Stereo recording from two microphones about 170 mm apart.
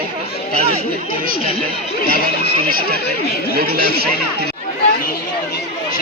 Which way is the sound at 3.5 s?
60° right (ahead or behind).